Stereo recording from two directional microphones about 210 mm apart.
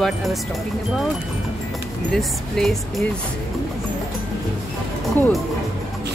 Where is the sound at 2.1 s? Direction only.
Centre (ahead or behind).